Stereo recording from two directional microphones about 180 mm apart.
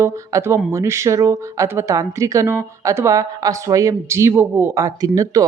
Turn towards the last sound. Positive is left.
turn(degrees=-20)  # may be behind; listen again after turning